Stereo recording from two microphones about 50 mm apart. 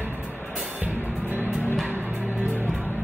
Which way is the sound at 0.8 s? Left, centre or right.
Right.